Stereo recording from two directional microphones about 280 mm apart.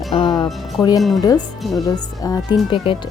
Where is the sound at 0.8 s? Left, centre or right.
Centre.